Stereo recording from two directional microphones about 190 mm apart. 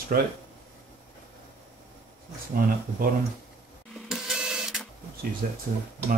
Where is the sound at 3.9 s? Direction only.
5° right (ahead or behind).